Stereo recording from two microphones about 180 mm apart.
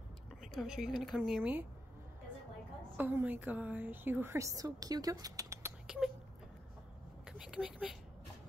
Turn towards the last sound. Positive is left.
turn(degrees=-5)  # may be behind; listen again after turning